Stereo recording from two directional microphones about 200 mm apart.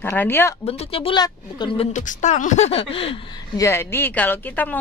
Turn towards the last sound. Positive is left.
turn(degrees=10)  # may be behind; listen again after turning